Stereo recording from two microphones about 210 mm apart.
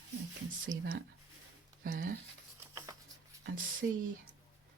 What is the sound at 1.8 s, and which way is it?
Speech, 40° right (ahead or behind).